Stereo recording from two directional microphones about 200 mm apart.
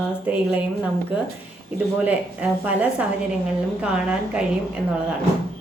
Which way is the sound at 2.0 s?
5° right (ahead or behind).